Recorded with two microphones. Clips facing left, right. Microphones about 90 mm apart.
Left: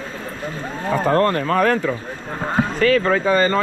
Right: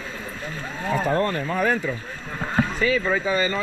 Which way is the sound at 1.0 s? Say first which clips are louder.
Left 7 dB; 60° left (ahead or behind).